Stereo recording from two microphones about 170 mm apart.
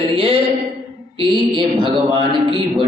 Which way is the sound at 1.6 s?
30° right (ahead or behind).